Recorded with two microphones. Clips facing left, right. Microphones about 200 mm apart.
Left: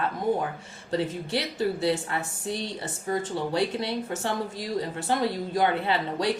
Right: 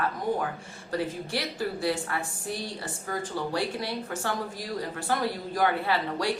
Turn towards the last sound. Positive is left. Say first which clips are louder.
# left 2 dB
turn(degrees=20)  # may be behind; listen again after turning